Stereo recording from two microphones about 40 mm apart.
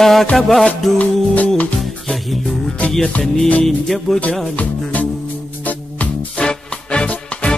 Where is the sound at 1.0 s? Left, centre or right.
Left.